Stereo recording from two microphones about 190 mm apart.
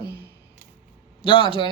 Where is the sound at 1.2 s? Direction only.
25° left (ahead or behind).